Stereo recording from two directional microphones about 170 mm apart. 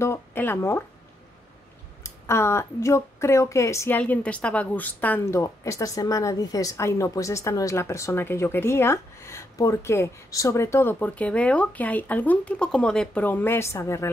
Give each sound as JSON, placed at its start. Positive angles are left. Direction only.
{"t": 0.0, "sound": "speech", "side_deg": 15}
{"t": 2.0, "sound": "speech", "side_deg": 15}